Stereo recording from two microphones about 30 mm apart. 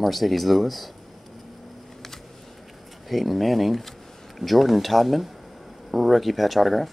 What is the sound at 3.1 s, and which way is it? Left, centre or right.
Speech, centre.